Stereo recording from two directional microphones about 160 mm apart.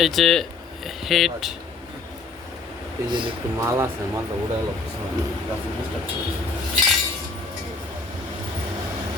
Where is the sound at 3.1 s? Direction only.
30° right (ahead or behind).